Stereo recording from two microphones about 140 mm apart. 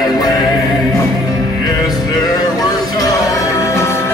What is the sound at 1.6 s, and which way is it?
Music, 30° left (ahead or behind).